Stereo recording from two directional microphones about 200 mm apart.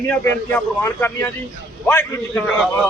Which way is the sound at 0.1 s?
10° left (ahead or behind).